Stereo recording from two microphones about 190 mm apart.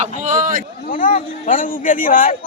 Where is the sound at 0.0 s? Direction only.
40° right (ahead or behind).